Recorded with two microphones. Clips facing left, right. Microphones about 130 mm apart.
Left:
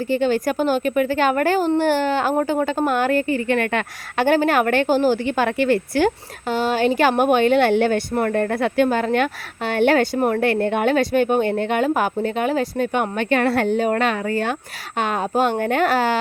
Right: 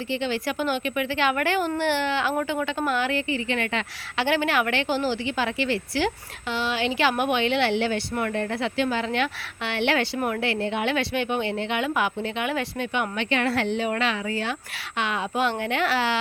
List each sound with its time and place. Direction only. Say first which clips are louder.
0.1 s speech: left 8 dB; 45° left (ahead or behind)